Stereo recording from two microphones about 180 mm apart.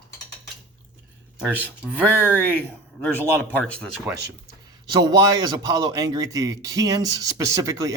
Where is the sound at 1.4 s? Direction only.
5° right (ahead or behind).